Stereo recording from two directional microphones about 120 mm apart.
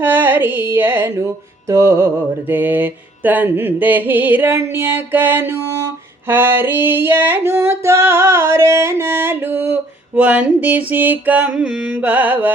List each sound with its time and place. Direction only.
0.0 s music: 20° right (ahead or behind)
10.2 s mantra: 10° right (ahead or behind)